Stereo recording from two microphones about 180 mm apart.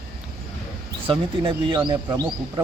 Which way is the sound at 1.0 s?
30° right (ahead or behind).